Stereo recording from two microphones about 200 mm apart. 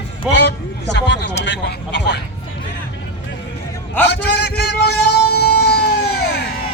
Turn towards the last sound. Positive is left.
turn(degrees=55)  # may be behind; listen again after turning